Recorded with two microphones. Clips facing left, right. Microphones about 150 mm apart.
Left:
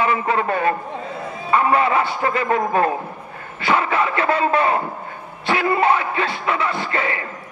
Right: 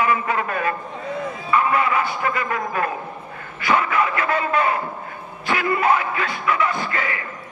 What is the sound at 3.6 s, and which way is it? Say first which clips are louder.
Speech: left 1 dB; 30° left (ahead or behind).